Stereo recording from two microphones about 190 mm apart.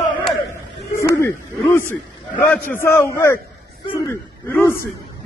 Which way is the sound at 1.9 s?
10° left (ahead or behind).